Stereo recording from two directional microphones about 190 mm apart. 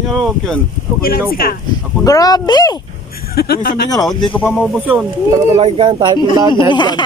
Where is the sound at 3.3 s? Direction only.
55° left (ahead or behind).